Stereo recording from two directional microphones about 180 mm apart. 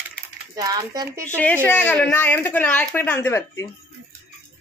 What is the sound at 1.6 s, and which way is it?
A woman's voice, 10° left (ahead or behind).